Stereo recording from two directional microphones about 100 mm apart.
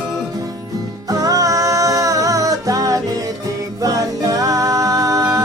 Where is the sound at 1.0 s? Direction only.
35° right (ahead or behind).